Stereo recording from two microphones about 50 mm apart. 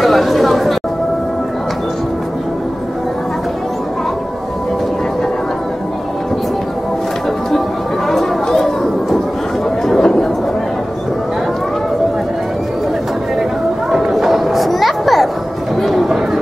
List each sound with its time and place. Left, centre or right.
0.0 s chatter: centre
8.1 s chatter: centre
13.9 s a sound: centre